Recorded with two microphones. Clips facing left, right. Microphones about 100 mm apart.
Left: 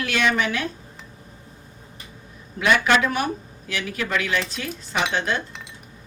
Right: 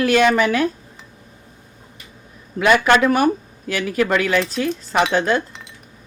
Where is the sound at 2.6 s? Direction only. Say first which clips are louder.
Right 5 dB; 50° right (ahead or behind).